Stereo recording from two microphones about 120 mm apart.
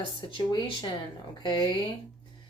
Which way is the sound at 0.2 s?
45° left (ahead or behind).